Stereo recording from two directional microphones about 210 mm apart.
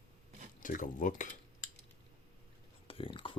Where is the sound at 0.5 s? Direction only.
40° left (ahead or behind).